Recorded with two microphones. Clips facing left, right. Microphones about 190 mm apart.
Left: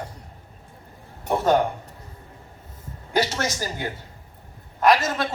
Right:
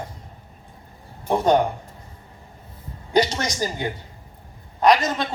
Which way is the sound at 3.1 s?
15° right (ahead or behind).